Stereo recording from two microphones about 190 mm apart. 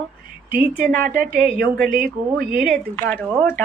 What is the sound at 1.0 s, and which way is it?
A woman's voice, 50° right (ahead or behind).